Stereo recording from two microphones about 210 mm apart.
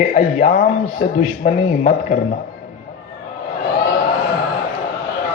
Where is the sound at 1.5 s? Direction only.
35° left (ahead or behind).